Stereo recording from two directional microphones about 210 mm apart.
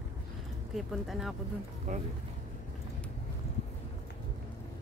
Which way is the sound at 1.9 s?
35° right (ahead or behind).